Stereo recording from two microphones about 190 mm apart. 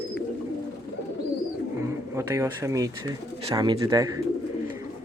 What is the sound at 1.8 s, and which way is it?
Speech, 15° right (ahead or behind).